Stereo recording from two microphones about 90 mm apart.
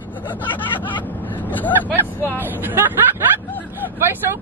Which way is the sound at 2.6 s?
20° right (ahead or behind).